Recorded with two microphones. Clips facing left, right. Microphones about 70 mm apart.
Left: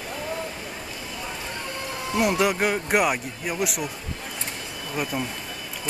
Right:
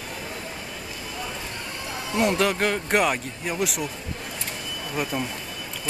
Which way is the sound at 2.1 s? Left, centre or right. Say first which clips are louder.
Even; centre.